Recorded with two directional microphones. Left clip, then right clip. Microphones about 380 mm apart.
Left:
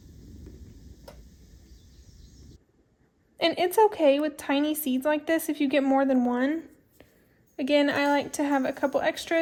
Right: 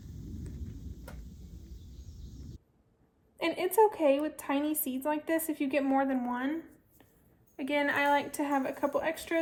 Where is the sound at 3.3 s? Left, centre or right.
Left.